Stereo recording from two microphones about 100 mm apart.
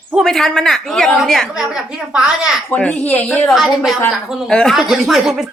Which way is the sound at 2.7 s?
15° left (ahead or behind).